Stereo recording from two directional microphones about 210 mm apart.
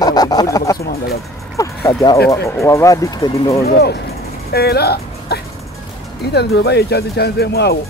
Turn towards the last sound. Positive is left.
turn(degrees=50)  # may be behind; listen again after turning